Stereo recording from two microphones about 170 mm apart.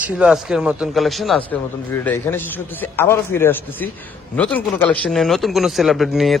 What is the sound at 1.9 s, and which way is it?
A man's voice, 10° left (ahead or behind).